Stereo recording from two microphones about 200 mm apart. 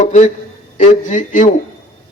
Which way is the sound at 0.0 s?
40° left (ahead or behind).